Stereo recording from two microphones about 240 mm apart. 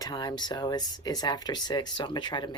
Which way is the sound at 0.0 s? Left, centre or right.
Centre.